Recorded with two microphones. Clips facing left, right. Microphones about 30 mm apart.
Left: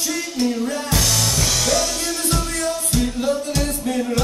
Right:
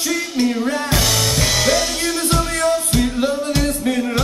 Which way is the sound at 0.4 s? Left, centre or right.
Right.